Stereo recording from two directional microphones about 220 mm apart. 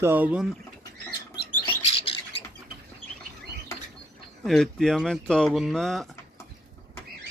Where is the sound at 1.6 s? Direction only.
25° left (ahead or behind).